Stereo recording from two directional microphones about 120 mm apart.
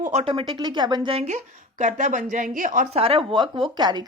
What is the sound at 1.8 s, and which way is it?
A woman's voice, 90° right.